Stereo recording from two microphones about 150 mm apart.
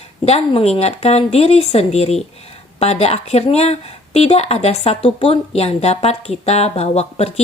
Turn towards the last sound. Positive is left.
turn(degrees=45)  # may be behind; listen again after turning